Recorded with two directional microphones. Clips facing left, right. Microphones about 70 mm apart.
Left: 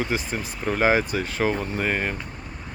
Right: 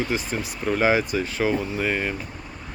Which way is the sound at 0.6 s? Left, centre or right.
Left.